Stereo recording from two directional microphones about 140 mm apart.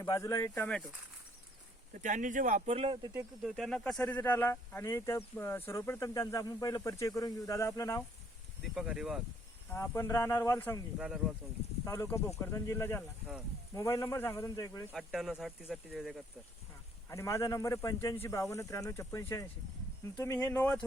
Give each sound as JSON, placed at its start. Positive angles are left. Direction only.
{"t": 0.0, "sound": "speech", "side_deg": 25}
{"t": 1.9, "sound": "speech", "side_deg": -65}
{"t": 2.7, "sound": "speech", "side_deg": -40}
{"t": 3.0, "sound": "speech", "side_deg": -20}
{"t": 3.4, "sound": "speech", "side_deg": 0}
{"t": 8.7, "sound": "speech", "side_deg": -5}
{"t": 9.7, "sound": "speech", "side_deg": 15}
{"t": 10.9, "sound": "speech", "side_deg": -5}
{"t": 11.9, "sound": "speech", "side_deg": 20}
{"t": 14.9, "sound": "speech", "side_deg": 0}
{"t": 17.1, "sound": "speech", "side_deg": 20}